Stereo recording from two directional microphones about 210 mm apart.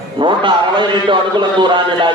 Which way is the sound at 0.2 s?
20° right (ahead or behind).